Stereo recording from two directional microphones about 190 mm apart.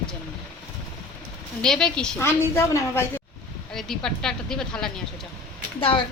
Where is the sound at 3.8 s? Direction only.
5° left (ahead or behind).